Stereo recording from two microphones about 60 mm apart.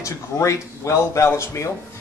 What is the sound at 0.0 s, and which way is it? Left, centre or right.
Speech, left.